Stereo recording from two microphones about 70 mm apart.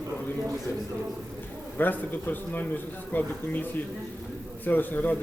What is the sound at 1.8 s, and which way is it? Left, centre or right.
A man's voice, left.